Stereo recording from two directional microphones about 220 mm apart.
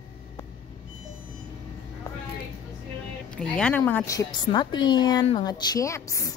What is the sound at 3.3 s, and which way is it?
A woman's voice, 5° left (ahead or behind).